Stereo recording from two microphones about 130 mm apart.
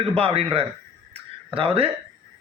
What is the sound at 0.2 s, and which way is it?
A man's voice, 50° right (ahead or behind).